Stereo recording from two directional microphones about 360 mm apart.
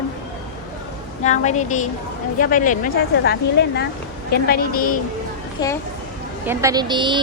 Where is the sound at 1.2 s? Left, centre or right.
Centre.